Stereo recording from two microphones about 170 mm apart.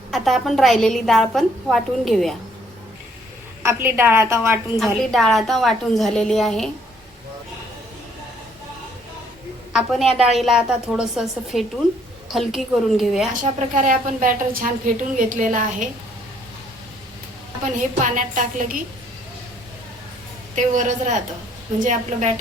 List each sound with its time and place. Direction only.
0.1 s a woman's voice: centre (ahead or behind)
3.6 s a woman's voice: 15° right (ahead or behind)
4.8 s a woman's voice: centre (ahead or behind)
9.7 s a woman's voice: centre (ahead or behind)
13.6 s a woman's voice: 50° right (ahead or behind)
17.7 s a woman's voice: 50° right (ahead or behind)
20.6 s a woman's voice: 45° right (ahead or behind)